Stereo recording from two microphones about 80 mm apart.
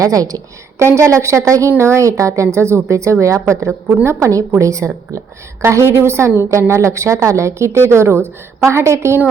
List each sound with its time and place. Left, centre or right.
0.0 s a woman's voice: right
0.8 s a woman's voice: right